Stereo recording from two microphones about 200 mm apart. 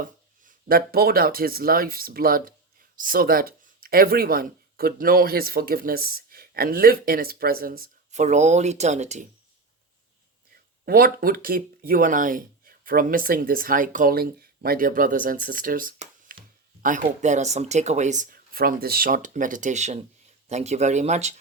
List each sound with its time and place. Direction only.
0.0 s speech: 45° right (ahead or behind)
10.8 s speech: 45° right (ahead or behind)